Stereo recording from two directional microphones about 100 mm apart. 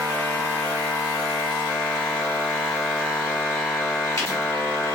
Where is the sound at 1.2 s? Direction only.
15° left (ahead or behind).